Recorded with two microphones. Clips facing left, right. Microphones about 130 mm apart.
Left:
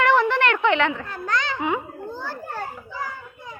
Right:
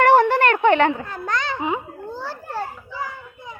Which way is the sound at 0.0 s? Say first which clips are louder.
Right 4 dB; 50° right (ahead or behind).